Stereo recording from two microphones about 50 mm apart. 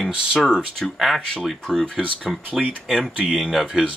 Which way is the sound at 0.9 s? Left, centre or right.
Centre.